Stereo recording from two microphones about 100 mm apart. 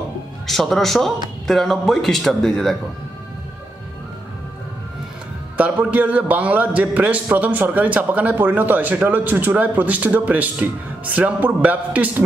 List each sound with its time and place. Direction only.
0.5 s a man's voice: centre (ahead or behind)
5.6 s a man's voice: 15° right (ahead or behind)